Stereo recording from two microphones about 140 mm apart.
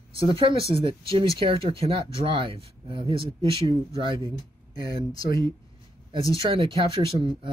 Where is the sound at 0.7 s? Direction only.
40° right (ahead or behind).